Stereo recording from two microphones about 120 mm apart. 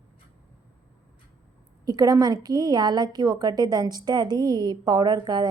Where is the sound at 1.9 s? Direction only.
30° right (ahead or behind).